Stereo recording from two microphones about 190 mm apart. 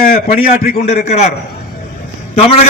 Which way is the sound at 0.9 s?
35° left (ahead or behind).